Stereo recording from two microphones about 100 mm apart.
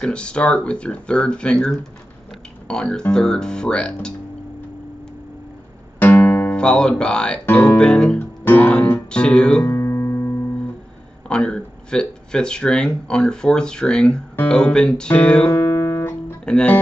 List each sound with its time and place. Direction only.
0.0 s speech: 10° left (ahead or behind)
5.9 s music: 20° left (ahead or behind)
7.4 s speech: 15° left (ahead or behind)
8.5 s music: 15° left (ahead or behind)
9.1 s speech: 10° left (ahead or behind)
9.7 s music: 25° left (ahead or behind)
11.2 s speech: 10° left (ahead or behind)
15.6 s music: 25° left (ahead or behind)
16.4 s music: 10° left (ahead or behind)